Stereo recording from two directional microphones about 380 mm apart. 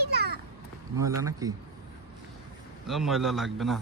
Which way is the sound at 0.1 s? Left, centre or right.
Right.